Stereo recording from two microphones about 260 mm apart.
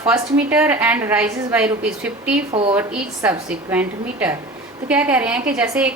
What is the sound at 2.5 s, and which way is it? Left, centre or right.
Speech, right.